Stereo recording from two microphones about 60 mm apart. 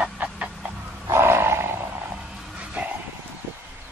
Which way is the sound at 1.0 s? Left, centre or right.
Right.